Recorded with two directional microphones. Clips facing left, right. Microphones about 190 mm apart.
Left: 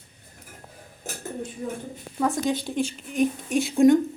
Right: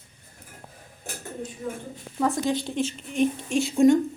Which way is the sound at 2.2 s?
Centre (ahead or behind).